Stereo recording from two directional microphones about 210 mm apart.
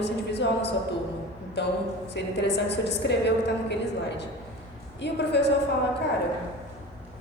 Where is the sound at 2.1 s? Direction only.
55° left (ahead or behind).